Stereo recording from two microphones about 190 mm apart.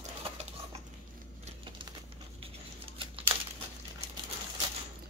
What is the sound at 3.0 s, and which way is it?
Crumpling, 30° right (ahead or behind).